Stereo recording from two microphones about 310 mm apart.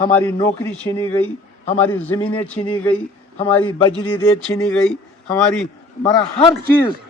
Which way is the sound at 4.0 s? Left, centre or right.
Centre.